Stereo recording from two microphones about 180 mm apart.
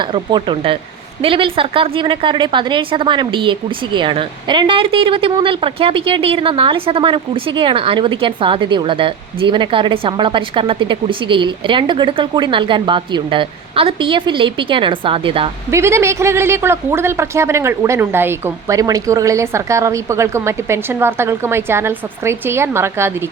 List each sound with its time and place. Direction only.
0.0 s a woman's voice: 25° right (ahead or behind)
15.7 s speech: 15° right (ahead or behind)